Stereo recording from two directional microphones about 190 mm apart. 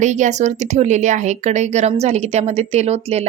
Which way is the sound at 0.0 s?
40° right (ahead or behind).